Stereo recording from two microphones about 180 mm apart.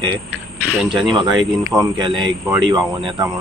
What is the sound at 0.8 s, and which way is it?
Speech, 25° right (ahead or behind).